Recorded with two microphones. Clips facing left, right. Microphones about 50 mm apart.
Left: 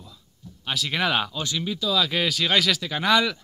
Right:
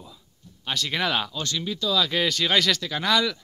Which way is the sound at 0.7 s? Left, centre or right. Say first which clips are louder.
Left 1 dB; centre.